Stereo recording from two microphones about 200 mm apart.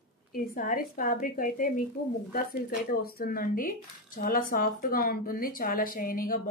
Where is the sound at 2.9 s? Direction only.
45° left (ahead or behind).